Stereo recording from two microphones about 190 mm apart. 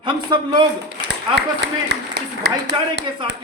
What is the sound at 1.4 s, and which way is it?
A man's voice, 60° right (ahead or behind).